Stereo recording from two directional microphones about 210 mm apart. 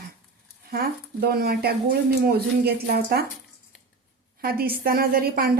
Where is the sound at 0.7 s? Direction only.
45° right (ahead or behind).